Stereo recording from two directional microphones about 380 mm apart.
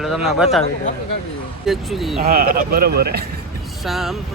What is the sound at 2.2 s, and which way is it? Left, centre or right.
Speech, right.